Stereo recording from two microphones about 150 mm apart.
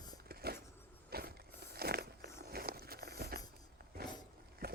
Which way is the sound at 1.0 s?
90° right.